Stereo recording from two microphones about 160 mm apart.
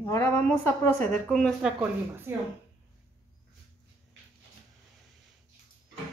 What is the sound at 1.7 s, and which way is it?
Speech, 15° right (ahead or behind).